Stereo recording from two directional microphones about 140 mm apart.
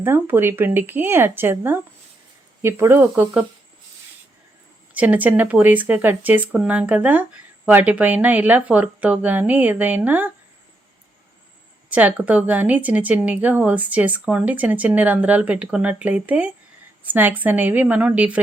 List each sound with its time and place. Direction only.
0.0 s speech: 15° right (ahead or behind)
4.9 s speech: 10° right (ahead or behind)
11.9 s speech: 10° right (ahead or behind)